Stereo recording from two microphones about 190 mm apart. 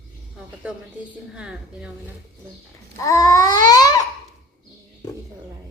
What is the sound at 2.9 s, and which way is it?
Babbling, 15° left (ahead or behind).